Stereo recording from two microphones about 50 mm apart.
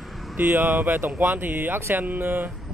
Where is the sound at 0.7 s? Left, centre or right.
Right.